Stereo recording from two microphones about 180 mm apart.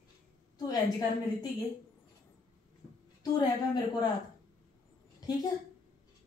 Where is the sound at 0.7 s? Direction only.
20° left (ahead or behind).